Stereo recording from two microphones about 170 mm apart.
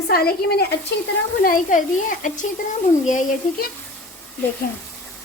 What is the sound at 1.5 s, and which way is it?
Speech, 50° left (ahead or behind).